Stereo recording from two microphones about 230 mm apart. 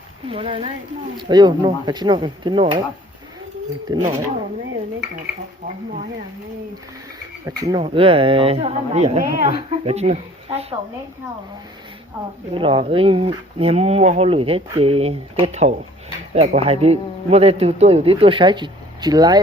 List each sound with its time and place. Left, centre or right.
0.3 s speech: right
3.9 s speech: centre
7.4 s speech: centre
12.5 s speech: right